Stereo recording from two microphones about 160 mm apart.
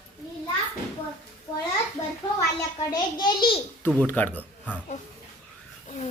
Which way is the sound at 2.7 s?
25° left (ahead or behind).